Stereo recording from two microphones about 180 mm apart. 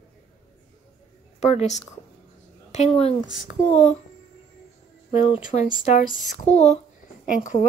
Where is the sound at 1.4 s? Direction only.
35° left (ahead or behind).